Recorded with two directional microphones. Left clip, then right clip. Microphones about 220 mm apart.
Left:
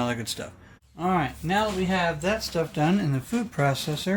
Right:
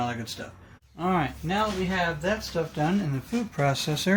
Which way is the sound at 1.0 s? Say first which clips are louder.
Left 1 dB; centre (ahead or behind).